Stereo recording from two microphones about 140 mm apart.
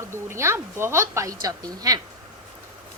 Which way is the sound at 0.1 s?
20° right (ahead or behind).